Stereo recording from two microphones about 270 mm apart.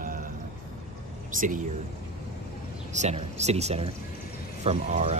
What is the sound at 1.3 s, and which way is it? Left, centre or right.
Speech, right.